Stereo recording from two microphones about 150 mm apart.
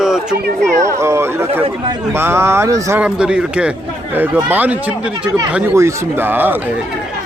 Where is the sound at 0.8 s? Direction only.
50° right (ahead or behind).